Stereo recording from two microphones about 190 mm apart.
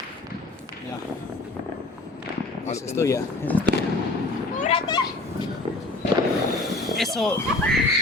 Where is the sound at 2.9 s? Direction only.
15° left (ahead or behind).